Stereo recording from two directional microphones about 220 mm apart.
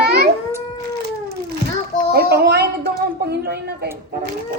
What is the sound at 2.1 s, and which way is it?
Speech, 45° right (ahead or behind).